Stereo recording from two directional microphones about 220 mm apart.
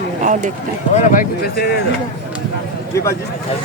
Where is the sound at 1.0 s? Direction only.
40° left (ahead or behind).